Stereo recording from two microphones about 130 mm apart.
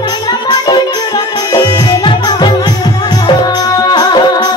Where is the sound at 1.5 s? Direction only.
35° left (ahead or behind).